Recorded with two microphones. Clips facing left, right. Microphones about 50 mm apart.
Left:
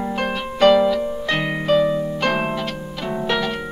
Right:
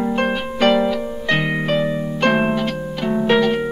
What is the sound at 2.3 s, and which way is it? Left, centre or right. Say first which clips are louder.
Harp: right 7 dB; centre.